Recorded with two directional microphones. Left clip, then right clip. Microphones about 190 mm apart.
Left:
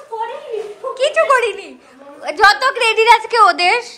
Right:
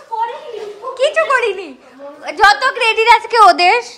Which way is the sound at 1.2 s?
5° right (ahead or behind).